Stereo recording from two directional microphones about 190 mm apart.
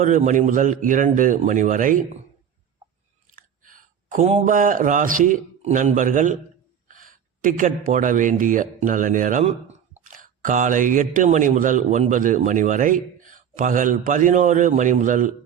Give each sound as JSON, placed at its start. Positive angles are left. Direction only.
{"t": 0.0, "sound": "speech", "side_deg": -40}
{"t": 3.3, "sound": "speech", "side_deg": -45}